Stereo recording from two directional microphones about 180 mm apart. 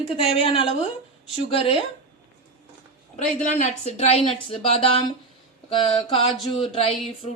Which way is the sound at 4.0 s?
30° left (ahead or behind).